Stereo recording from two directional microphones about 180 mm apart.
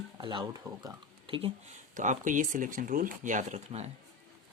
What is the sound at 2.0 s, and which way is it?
Speech, 45° right (ahead or behind).